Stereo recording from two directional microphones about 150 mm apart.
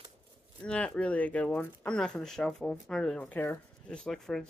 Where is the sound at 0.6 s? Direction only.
5° left (ahead or behind).